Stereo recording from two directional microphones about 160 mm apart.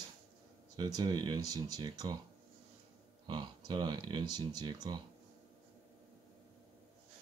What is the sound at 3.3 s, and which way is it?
Speech, 30° right (ahead or behind).